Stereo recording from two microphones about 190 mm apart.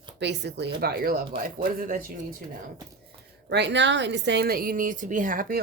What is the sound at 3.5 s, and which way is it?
Speech, 65° right (ahead or behind).